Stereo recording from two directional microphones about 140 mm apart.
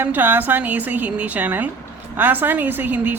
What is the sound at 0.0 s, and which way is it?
A woman's voice, 15° right (ahead or behind).